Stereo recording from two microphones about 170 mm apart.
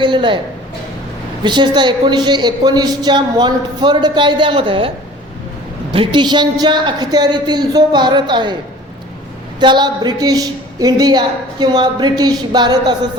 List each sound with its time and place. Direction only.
0.0 s a woman's voice: 30° right (ahead or behind)
1.5 s a woman's voice: 25° right (ahead or behind)
5.9 s a woman's voice: 30° right (ahead or behind)
9.6 s a woman's voice: 25° right (ahead or behind)